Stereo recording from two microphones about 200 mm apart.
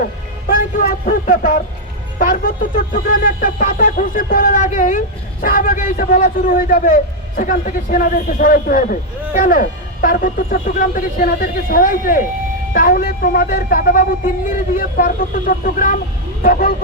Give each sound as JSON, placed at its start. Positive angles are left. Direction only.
{"t": 0.4, "sound": "speech", "side_deg": 45}